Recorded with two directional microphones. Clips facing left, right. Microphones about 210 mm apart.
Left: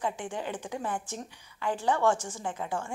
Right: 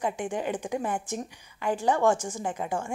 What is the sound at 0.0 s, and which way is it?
A woman's voice, 15° right (ahead or behind).